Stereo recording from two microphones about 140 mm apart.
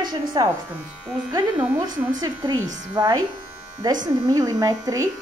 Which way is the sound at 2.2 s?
25° right (ahead or behind).